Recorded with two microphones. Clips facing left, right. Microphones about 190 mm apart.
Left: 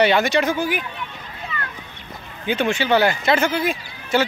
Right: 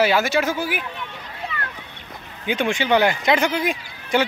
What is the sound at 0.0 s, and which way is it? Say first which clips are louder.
Speech: left 2 dB; 5° right (ahead or behind).